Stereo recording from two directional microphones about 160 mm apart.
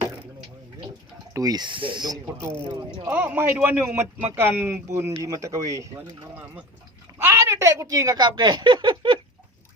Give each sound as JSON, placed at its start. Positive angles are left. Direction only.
{"t": 1.3, "sound": "speech", "side_deg": -20}
{"t": 2.2, "sound": "speech", "side_deg": -15}
{"t": 3.1, "sound": "speech", "side_deg": -10}